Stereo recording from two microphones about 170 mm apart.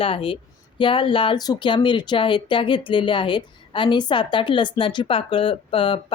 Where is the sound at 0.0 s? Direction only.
35° left (ahead or behind).